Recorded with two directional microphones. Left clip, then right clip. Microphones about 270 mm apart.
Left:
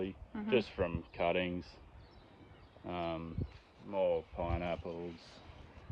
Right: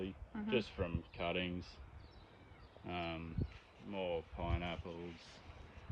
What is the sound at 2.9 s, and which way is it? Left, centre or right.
Speech, centre.